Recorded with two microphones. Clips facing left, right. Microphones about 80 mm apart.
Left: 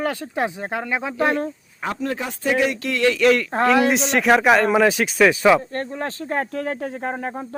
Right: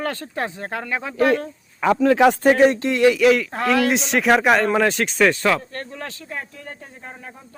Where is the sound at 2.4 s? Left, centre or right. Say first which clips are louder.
Right 6 dB; right.